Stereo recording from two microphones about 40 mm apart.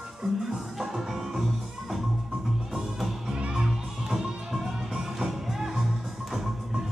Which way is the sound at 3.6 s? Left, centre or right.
Centre.